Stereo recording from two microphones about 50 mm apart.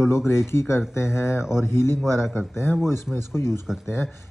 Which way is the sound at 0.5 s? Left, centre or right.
Left.